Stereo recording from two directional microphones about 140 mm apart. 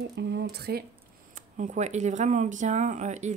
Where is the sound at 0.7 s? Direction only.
90° right.